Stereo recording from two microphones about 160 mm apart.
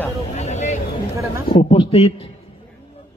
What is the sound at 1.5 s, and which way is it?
Speech, 40° left (ahead or behind).